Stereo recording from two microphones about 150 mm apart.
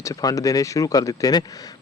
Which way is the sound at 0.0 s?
25° left (ahead or behind).